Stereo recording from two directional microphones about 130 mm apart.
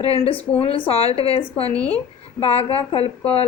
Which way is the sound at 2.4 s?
45° left (ahead or behind).